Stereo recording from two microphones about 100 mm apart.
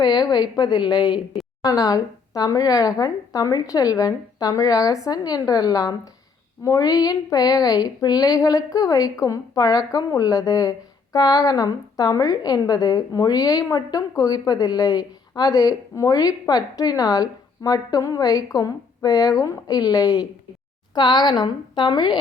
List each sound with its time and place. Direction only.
0.0 s a woman's voice: 45° left (ahead or behind)